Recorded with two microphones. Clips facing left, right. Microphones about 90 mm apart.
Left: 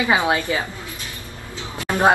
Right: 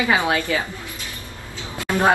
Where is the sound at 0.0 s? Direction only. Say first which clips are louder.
Left 1 dB; 20° left (ahead or behind).